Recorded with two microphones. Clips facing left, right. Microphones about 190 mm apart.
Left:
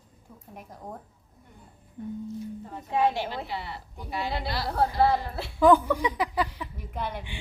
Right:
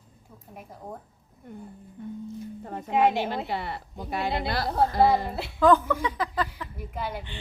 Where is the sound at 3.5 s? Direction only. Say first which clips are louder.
Right 4 dB; 55° right (ahead or behind).